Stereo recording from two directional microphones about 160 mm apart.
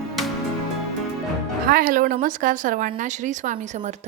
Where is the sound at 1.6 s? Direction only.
60° right (ahead or behind).